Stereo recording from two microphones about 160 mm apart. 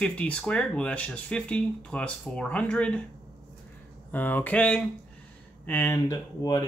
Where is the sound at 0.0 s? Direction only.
5° left (ahead or behind).